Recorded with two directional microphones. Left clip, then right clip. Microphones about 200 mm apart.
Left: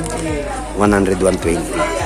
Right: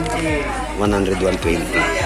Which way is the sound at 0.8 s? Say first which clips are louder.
Left 5 dB; 25° left (ahead or behind).